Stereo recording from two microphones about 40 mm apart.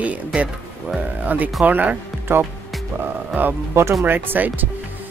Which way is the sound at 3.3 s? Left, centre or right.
Right.